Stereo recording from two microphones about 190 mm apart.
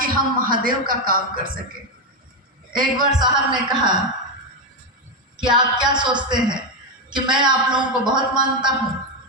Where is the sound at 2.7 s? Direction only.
45° right (ahead or behind).